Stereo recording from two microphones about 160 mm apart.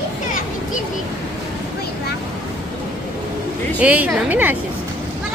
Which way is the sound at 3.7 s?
10° right (ahead or behind).